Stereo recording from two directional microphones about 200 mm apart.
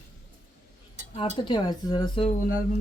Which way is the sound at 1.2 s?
25° left (ahead or behind).